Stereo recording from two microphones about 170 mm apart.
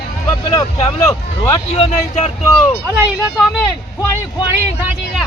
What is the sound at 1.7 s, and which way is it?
Speech, 40° left (ahead or behind).